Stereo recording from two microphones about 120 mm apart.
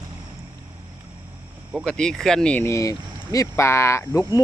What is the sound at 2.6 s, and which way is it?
Speech, 25° left (ahead or behind).